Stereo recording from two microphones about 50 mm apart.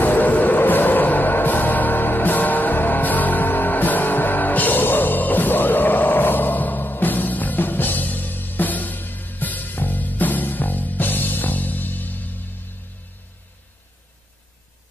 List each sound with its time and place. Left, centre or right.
0.0 s music: left